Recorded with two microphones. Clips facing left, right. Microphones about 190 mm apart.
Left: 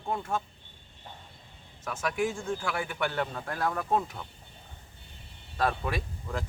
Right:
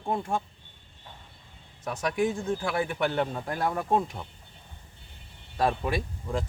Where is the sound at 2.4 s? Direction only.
30° right (ahead or behind).